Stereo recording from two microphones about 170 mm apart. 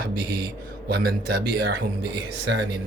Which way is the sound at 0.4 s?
70° right (ahead or behind).